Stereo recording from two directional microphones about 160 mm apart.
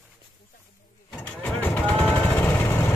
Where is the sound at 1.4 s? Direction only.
10° left (ahead or behind).